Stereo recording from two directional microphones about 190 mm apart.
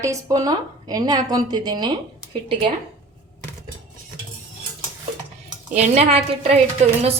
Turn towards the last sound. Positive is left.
turn(degrees=-35)  # may be behind; listen again after turning